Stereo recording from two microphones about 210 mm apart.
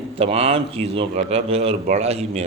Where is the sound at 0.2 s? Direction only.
30° right (ahead or behind).